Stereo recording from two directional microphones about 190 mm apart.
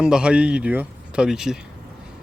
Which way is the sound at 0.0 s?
5° right (ahead or behind).